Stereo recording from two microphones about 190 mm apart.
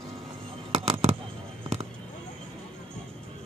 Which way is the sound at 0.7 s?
30° right (ahead or behind).